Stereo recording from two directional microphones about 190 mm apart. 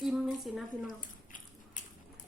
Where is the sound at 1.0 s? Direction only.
45° left (ahead or behind).